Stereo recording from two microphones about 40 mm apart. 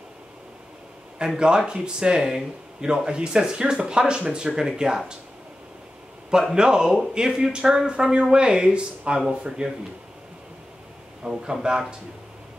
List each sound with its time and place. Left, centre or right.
1.1 s speech: centre
6.5 s speech: centre
11.2 s speech: right